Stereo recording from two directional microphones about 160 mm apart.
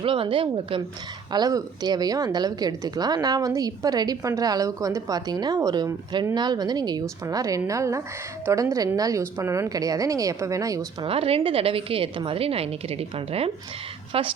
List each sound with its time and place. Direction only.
0.0 s a woman's voice: 35° right (ahead or behind)
1.3 s a woman's voice: 25° right (ahead or behind)
11.0 s a woman's voice: 35° right (ahead or behind)